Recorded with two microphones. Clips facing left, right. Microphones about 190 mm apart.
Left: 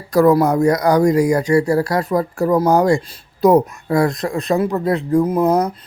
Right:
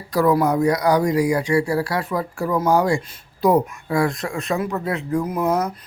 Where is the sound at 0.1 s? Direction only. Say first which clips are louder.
Left 5 dB; 45° left (ahead or behind).